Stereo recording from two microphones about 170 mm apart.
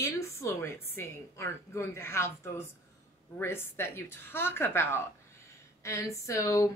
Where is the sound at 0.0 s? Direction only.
15° left (ahead or behind).